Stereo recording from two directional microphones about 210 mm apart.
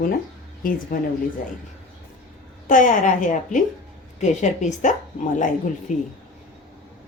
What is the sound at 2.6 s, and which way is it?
Speech, 40° left (ahead or behind).